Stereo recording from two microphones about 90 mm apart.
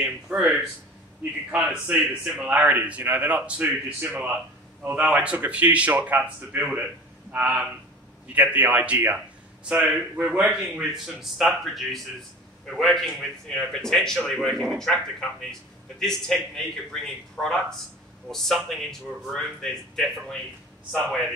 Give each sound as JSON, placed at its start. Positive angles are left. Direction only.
{"t": 0.0, "sound": "a man's voice", "side_deg": -15}
{"t": 10.5, "sound": "a man's voice", "side_deg": 0}